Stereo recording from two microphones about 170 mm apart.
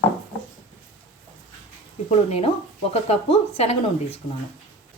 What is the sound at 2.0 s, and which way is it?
Speech, 40° left (ahead or behind).